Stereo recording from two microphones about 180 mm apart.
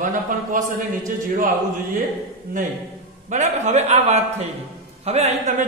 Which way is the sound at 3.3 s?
40° right (ahead or behind).